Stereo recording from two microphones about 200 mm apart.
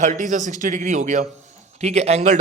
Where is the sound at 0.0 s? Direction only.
40° right (ahead or behind).